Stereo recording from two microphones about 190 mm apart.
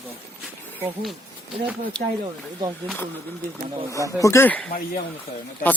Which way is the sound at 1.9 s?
5° left (ahead or behind).